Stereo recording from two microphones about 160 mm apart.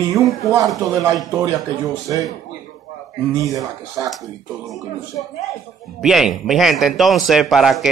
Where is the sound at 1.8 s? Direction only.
20° right (ahead or behind).